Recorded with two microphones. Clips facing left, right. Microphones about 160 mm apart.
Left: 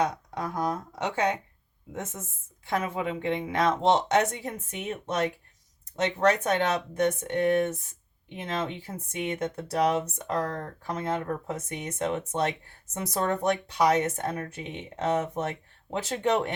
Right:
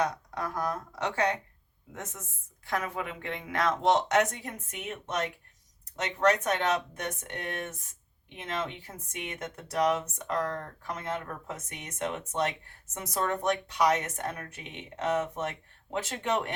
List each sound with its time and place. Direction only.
0.0 s speech: 25° left (ahead or behind)
9.1 s speech: 30° left (ahead or behind)